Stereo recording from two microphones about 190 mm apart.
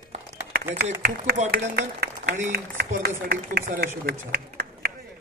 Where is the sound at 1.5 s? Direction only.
55° right (ahead or behind).